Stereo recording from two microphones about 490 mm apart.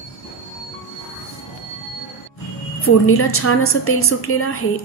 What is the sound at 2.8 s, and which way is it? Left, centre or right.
A woman's voice, left.